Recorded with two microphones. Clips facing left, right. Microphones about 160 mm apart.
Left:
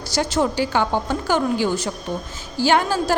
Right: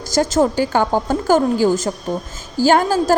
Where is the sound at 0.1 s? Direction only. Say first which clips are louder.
Right 5 dB; 45° right (ahead or behind).